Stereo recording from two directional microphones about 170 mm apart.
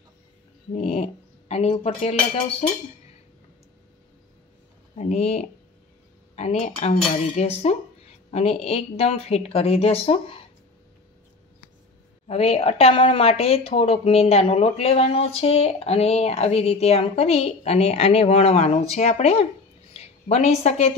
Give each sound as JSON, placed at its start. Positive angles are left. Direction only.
{"t": 0.7, "sound": "speech", "side_deg": 40}
{"t": 4.9, "sound": "speech", "side_deg": 40}
{"t": 12.3, "sound": "a woman's voice", "side_deg": 35}